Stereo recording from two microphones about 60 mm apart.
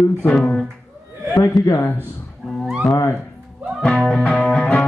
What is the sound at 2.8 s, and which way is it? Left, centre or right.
Speech, centre.